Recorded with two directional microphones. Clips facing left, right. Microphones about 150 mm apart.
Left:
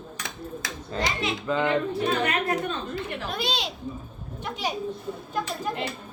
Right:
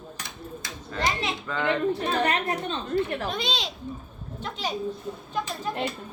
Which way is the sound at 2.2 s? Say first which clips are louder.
Right 1 dB; 35° right (ahead or behind).